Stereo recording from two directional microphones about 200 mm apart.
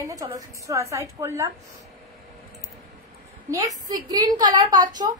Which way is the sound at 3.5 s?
20° right (ahead or behind).